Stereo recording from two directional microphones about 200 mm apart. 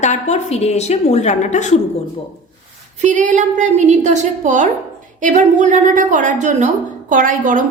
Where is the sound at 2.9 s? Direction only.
35° right (ahead or behind).